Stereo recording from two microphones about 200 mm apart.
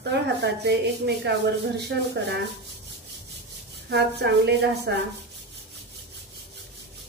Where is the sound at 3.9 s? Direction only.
55° right (ahead or behind).